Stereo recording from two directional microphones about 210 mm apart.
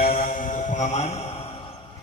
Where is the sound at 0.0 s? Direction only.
40° left (ahead or behind).